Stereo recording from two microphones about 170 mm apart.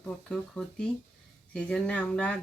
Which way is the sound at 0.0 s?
5° left (ahead or behind).